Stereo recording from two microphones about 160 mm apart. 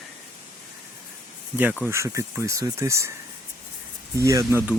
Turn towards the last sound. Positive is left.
turn(degrees=-15)  # may be behind; listen again after turning